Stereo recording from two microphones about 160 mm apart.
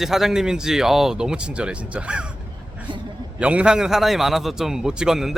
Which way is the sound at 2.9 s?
30° right (ahead or behind).